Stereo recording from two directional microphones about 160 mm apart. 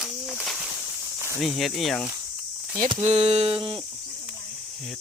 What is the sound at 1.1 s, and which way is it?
Snake, 15° right (ahead or behind).